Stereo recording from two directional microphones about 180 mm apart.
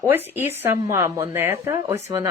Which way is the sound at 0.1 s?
10° right (ahead or behind).